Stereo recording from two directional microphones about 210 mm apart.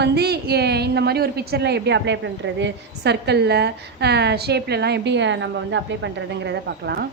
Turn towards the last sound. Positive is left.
turn(degrees=-50)  # may be behind; listen again after turning